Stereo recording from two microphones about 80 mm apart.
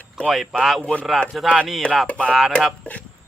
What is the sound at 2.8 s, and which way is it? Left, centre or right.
Speech, centre.